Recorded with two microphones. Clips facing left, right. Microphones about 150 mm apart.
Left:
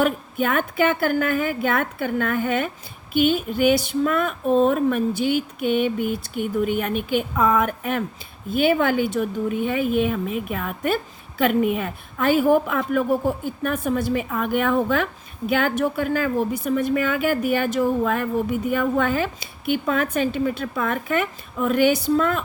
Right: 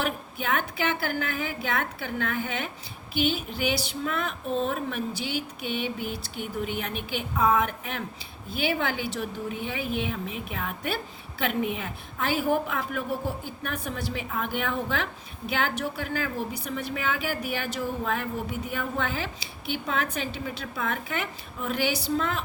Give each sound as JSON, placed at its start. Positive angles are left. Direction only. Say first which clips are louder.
{"t": 0.0, "sound": "speech", "louder": "left 9 dB", "side_deg": 50}